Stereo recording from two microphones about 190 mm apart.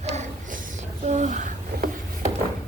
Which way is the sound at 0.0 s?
35° right (ahead or behind).